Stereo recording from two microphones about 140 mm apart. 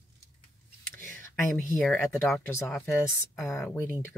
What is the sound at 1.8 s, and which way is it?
Speech, 5° left (ahead or behind).